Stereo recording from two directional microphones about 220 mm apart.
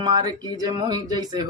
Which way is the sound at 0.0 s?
20° right (ahead or behind).